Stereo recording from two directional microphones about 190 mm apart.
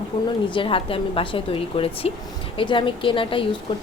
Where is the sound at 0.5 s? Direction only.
30° left (ahead or behind).